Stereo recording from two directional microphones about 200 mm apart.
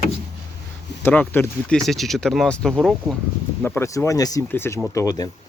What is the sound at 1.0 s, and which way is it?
Speech, 10° left (ahead or behind).